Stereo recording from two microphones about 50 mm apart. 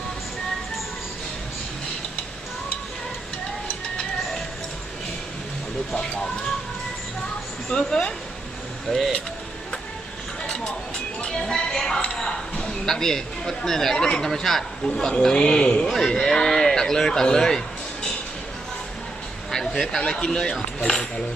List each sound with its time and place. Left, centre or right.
7.7 s speech: centre
8.9 s speech: centre
10.4 s music: centre
12.0 s speech: centre
14.3 s speech: centre
14.8 s a man's voice: centre
19.5 s a sound: centre
20.0 s a man's voice: centre